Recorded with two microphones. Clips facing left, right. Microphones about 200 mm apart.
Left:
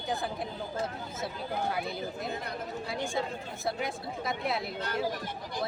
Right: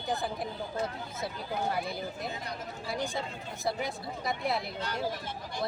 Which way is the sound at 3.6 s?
Centre (ahead or behind).